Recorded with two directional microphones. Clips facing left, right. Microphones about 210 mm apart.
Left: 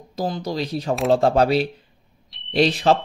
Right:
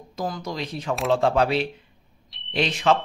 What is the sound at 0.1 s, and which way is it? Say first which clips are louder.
Speech: left 4 dB; 35° left (ahead or behind).